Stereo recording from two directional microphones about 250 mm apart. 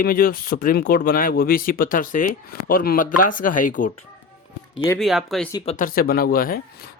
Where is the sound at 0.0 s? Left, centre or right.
Left.